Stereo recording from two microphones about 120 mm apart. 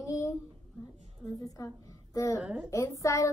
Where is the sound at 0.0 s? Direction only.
25° left (ahead or behind).